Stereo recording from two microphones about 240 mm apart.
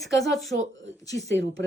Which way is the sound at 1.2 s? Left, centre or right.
Right.